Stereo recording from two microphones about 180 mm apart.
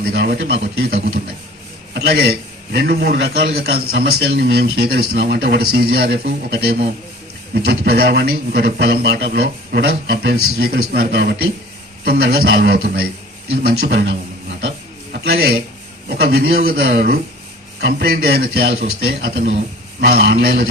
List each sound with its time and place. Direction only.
0.0 s a man's voice: 60° right (ahead or behind)
7.5 s a man's voice: 60° right (ahead or behind)